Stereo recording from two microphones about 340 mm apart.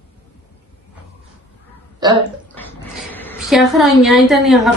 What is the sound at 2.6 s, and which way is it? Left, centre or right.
Speech, centre.